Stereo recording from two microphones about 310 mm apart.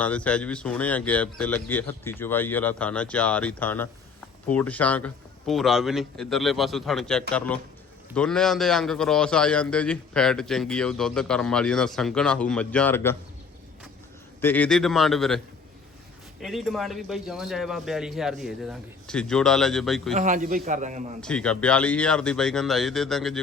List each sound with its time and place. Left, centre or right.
0.0 s a man's voice: centre
14.4 s a man's voice: centre
16.4 s a man's voice: centre
20.1 s a man's voice: right
21.2 s a man's voice: centre